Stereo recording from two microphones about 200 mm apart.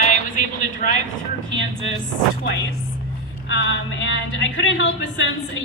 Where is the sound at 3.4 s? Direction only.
65° left (ahead or behind).